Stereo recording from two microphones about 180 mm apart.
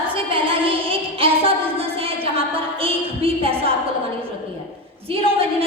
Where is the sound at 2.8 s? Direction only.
30° right (ahead or behind).